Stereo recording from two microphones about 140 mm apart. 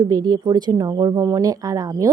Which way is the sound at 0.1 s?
30° right (ahead or behind).